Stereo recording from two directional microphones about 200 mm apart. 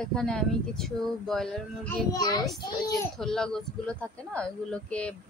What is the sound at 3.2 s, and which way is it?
Speech, 5° left (ahead or behind).